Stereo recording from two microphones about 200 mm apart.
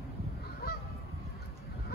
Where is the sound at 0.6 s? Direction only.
50° left (ahead or behind).